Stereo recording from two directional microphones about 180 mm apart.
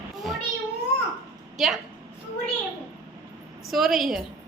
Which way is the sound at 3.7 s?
Centre (ahead or behind).